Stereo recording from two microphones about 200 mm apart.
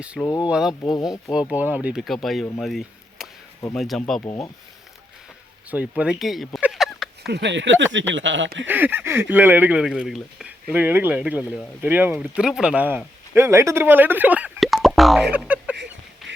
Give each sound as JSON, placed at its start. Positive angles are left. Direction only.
{"t": 0.4, "sound": "speech", "side_deg": -5}
{"t": 4.3, "sound": "speech", "side_deg": 15}
{"t": 6.0, "sound": "a sound", "side_deg": 0}
{"t": 7.3, "sound": "speech", "side_deg": -60}
{"t": 8.6, "sound": "speech", "side_deg": -10}
{"t": 15.7, "sound": "a sound", "side_deg": -60}